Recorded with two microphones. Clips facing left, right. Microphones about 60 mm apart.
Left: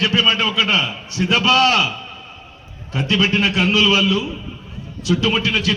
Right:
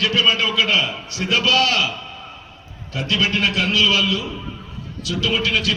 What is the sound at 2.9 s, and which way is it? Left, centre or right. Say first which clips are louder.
A man's voice: left 3 dB; left.